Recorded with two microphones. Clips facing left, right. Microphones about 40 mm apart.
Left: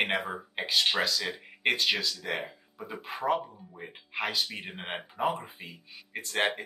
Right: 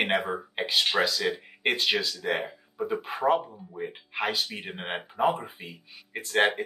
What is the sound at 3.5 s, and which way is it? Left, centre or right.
Speech, centre.